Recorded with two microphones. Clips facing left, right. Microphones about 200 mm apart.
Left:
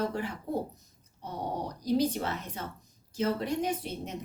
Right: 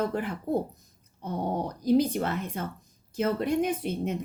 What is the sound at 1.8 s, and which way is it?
A woman's voice, 55° right (ahead or behind).